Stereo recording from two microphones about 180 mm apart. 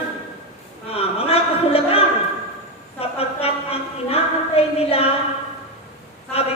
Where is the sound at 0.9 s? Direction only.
35° left (ahead or behind).